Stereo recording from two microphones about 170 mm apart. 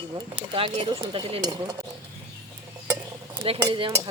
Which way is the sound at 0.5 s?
30° right (ahead or behind).